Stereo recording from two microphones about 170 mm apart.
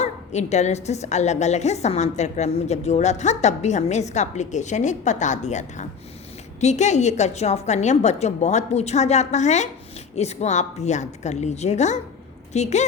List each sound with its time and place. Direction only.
0.0 s a woman's voice: 40° left (ahead or behind)